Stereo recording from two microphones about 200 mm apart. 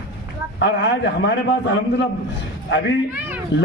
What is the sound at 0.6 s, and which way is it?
Speech, 60° left (ahead or behind).